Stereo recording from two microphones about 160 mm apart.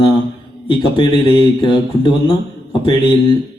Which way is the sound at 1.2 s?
30° left (ahead or behind).